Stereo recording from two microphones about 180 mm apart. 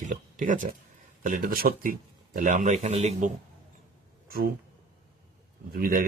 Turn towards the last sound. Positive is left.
turn(degrees=-55)  # may be behind; listen again after turning